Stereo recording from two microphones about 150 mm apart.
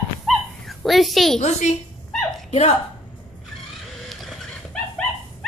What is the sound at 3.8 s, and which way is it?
Vehicle, centre (ahead or behind).